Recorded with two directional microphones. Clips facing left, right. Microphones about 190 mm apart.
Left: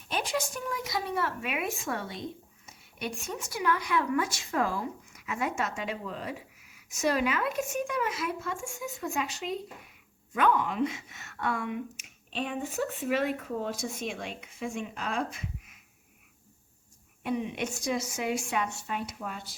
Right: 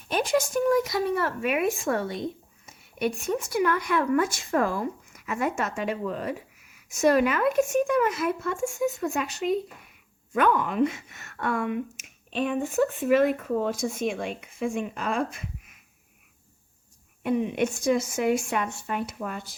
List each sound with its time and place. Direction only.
0.1 s speech: 45° right (ahead or behind)
17.2 s speech: 50° right (ahead or behind)